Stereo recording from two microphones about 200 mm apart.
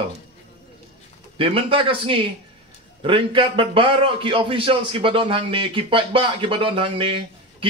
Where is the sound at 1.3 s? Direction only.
25° right (ahead or behind).